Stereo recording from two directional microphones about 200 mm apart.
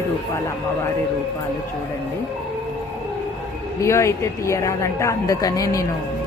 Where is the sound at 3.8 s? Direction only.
15° left (ahead or behind).